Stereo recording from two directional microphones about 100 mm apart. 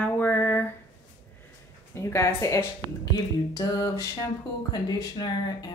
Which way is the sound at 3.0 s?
40° left (ahead or behind).